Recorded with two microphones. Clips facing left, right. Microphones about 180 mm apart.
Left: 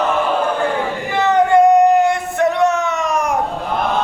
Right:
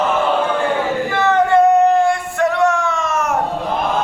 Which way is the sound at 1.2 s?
15° left (ahead or behind).